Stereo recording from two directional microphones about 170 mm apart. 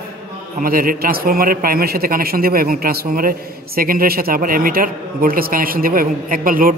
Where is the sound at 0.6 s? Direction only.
55° right (ahead or behind).